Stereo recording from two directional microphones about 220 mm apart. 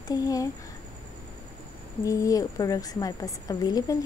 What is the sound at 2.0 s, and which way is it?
A woman's voice, 15° left (ahead or behind).